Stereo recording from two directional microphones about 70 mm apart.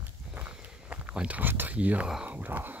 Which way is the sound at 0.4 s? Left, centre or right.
Right.